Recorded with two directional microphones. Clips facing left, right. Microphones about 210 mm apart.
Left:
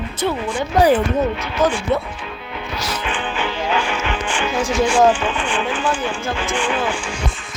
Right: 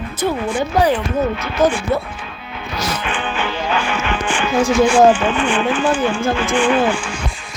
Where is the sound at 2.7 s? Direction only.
50° right (ahead or behind).